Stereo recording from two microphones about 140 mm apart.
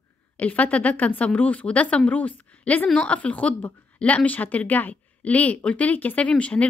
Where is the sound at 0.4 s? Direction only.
10° left (ahead or behind).